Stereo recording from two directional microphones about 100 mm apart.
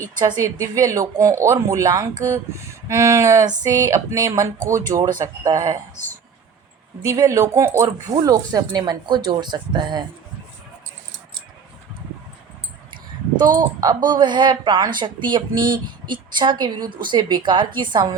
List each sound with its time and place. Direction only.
0.2 s speech: 40° right (ahead or behind)
7.0 s speech: 35° right (ahead or behind)
13.4 s speech: 40° right (ahead or behind)